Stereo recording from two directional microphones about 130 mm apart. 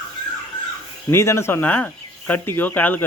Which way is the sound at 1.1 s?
20° left (ahead or behind).